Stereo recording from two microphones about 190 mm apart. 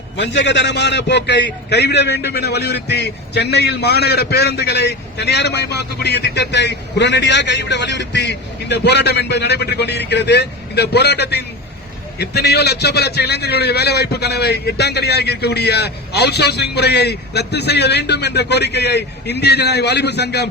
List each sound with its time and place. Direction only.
0.2 s a man's voice: 70° left (ahead or behind)